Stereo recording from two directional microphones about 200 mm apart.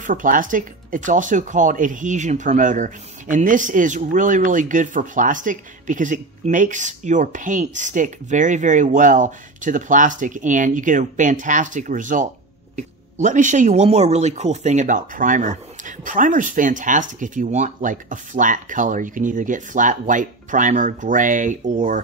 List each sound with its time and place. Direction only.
0.0 s speech: 40° right (ahead or behind)